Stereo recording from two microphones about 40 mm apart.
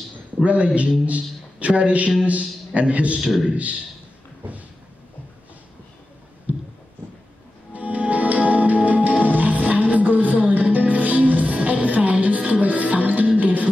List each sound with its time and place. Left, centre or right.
0.4 s a man's voice: right
6.5 s a sound: right
7.7 s music: right